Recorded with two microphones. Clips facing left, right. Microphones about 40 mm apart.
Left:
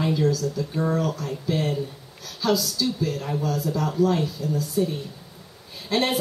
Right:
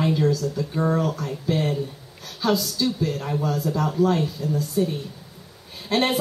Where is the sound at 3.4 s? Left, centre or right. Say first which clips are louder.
Right 2 dB; right.